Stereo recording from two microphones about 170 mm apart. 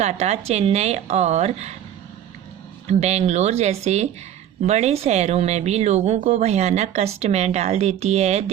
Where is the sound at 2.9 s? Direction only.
40° right (ahead or behind).